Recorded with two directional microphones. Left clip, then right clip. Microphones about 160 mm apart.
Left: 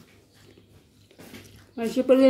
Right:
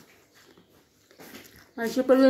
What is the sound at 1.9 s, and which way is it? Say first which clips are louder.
Speech: left 1 dB; 10° left (ahead or behind).